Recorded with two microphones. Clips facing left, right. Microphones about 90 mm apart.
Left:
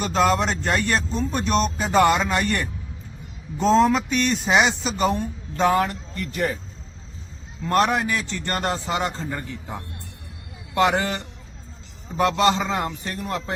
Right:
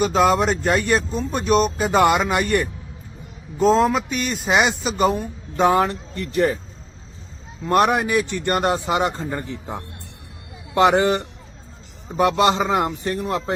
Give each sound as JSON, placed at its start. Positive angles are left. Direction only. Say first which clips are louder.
{"t": 0.0, "sound": "speech", "louder": "right 3 dB", "side_deg": -5}
{"t": 5.6, "sound": "a man's voice", "louder": "right 2 dB", "side_deg": -20}
{"t": 7.7, "sound": "a man's voice", "louder": "right 3 dB", "side_deg": -15}